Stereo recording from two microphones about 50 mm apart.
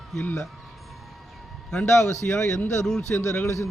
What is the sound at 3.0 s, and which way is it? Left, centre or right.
Speech, left.